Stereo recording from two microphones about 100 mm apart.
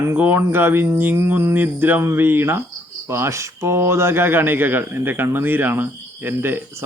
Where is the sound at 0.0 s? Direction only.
20° right (ahead or behind).